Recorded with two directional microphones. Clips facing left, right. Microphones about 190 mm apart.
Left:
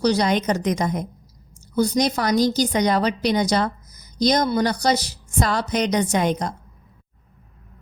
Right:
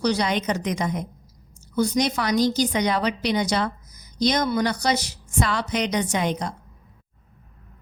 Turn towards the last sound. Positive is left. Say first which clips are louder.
# left 3 dB
turn(degrees=45)  # may be behind; listen again after turning